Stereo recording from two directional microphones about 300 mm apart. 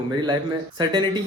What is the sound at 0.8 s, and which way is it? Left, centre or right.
Speech, centre.